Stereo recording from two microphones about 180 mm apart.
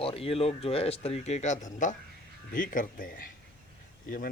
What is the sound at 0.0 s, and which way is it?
Speech, 30° left (ahead or behind).